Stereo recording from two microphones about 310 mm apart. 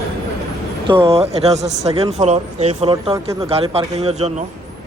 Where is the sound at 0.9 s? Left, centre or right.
Centre.